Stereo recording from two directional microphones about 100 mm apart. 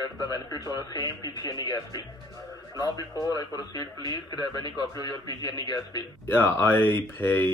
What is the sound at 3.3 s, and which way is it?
A man's voice, 40° left (ahead or behind).